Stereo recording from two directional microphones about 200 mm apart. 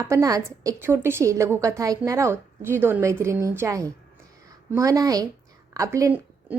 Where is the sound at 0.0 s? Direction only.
15° right (ahead or behind).